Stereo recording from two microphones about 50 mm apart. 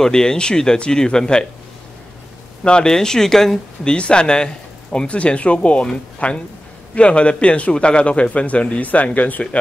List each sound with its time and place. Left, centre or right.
0.0 s speech: centre
2.6 s speech: centre
3.9 s a man's voice: left